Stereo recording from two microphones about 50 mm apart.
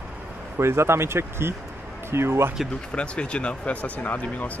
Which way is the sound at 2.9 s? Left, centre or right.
Left.